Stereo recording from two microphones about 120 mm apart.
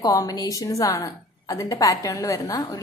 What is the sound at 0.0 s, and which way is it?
A woman's voice, 30° left (ahead or behind).